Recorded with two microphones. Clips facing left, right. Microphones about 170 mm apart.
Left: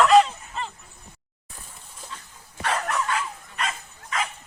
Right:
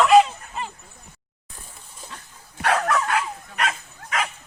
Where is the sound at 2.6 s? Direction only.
70° right (ahead or behind).